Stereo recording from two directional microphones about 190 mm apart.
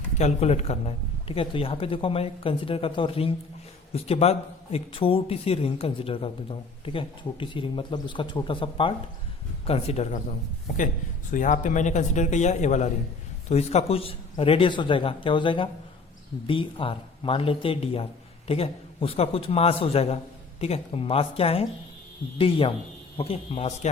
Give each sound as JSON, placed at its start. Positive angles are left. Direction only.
{"t": 0.2, "sound": "a man's voice", "side_deg": 35}
{"t": 11.3, "sound": "a man's voice", "side_deg": 40}